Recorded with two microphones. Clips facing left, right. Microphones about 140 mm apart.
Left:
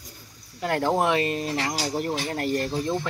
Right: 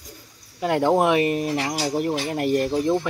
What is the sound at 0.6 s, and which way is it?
Speech, 15° right (ahead or behind).